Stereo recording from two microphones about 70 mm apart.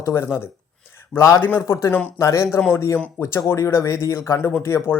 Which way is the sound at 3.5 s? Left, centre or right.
Left.